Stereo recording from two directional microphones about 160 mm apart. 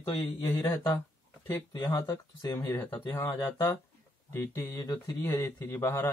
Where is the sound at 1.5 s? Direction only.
20° left (ahead or behind).